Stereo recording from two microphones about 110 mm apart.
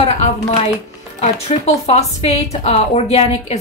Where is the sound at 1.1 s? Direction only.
85° left.